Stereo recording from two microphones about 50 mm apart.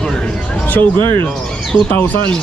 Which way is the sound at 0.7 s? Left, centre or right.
Left.